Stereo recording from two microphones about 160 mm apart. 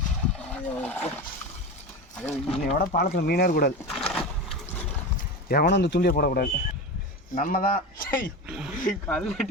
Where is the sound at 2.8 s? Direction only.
60° left (ahead or behind).